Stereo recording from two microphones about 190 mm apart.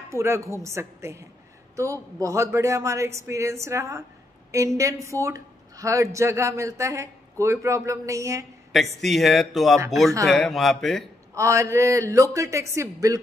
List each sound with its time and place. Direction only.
0.1 s speech: 15° right (ahead or behind)
9.0 s speech: centre (ahead or behind)
11.3 s speech: 15° right (ahead or behind)